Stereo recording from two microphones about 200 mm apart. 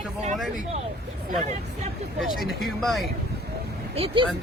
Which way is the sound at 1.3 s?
35° right (ahead or behind).